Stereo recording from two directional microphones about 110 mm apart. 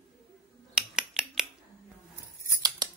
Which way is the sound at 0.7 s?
5° right (ahead or behind).